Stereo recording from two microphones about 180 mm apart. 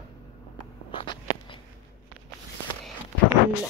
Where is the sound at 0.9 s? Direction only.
25° left (ahead or behind).